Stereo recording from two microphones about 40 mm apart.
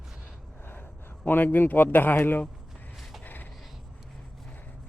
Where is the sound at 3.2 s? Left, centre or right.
Left.